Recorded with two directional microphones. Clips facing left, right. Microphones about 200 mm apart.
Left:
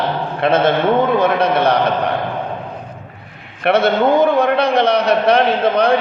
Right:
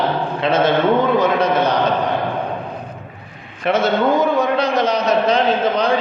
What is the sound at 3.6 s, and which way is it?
A man's voice, 65° left (ahead or behind).